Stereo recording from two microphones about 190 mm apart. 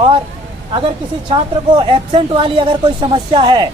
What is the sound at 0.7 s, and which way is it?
A woman's voice, 30° right (ahead or behind).